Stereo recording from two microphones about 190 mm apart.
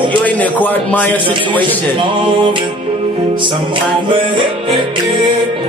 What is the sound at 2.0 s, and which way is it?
Music, 25° right (ahead or behind).